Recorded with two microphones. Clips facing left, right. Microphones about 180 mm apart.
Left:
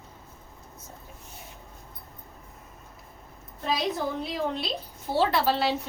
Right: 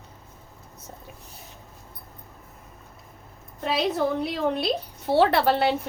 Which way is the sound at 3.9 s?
65° right (ahead or behind).